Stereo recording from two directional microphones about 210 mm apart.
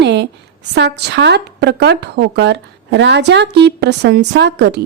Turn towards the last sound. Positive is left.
turn(degrees=-55)  # may be behind; listen again after turning